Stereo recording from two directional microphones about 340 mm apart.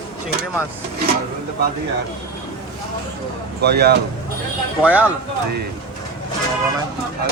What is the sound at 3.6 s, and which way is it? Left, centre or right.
Speech, right.